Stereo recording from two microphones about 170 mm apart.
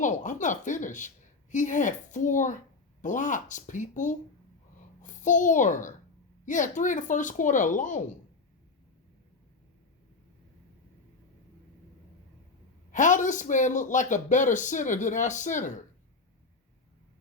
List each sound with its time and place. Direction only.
0.0 s a child's voice: 45° left (ahead or behind)
12.9 s speech: 50° left (ahead or behind)